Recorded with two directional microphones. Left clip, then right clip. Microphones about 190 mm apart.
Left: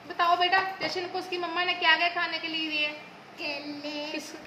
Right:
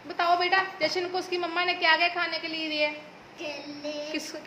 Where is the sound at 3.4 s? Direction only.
40° left (ahead or behind).